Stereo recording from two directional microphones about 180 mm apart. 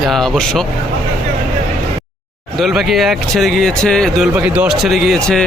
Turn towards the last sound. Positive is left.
turn(degrees=0)  # may be behind; listen again after turning